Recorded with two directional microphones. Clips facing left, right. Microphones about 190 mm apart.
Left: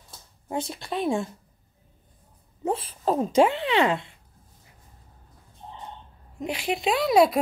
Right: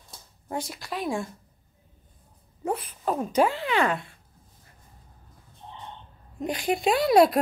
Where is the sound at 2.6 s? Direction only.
25° left (ahead or behind).